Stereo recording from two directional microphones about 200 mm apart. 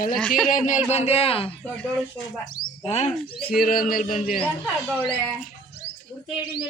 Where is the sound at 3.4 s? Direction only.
45° left (ahead or behind).